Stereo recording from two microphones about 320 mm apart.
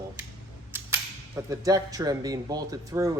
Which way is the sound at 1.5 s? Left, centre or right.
Centre.